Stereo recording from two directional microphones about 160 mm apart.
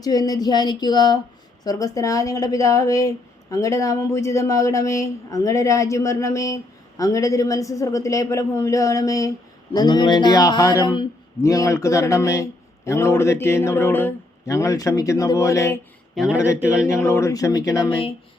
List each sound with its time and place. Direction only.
0.0 s speech: 25° left (ahead or behind)
16.1 s a man's voice: centre (ahead or behind)
17.0 s speech: 15° left (ahead or behind)